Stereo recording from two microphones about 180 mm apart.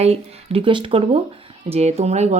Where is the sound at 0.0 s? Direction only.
35° right (ahead or behind).